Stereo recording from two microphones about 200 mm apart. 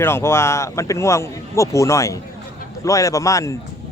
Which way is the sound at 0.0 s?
15° left (ahead or behind).